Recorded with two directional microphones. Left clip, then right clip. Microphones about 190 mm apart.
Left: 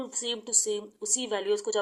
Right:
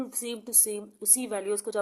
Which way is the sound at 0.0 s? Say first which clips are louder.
Left 3 dB; 25° right (ahead or behind).